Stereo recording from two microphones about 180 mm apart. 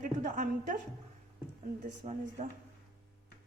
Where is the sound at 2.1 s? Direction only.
40° right (ahead or behind).